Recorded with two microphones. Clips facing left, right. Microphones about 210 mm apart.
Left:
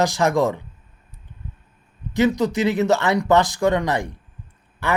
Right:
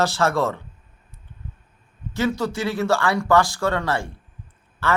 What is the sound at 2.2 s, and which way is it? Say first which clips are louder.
Speech: left 5 dB; 15° left (ahead or behind).